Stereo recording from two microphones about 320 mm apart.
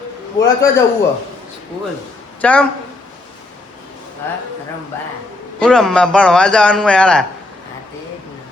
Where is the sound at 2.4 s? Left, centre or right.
Centre.